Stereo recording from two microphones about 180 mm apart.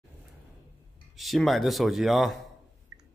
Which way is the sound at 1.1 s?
Centre (ahead or behind).